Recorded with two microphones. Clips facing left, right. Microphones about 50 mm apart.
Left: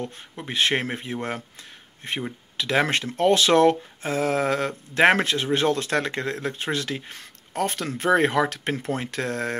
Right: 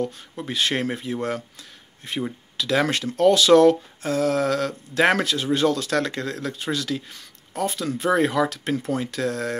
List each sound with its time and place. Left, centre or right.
0.0 s speech: left